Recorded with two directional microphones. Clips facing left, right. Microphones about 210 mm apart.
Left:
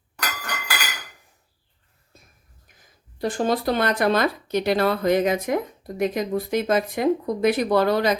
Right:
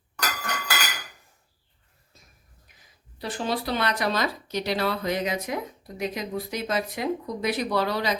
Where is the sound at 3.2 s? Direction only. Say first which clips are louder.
Left 6 dB; 50° left (ahead or behind).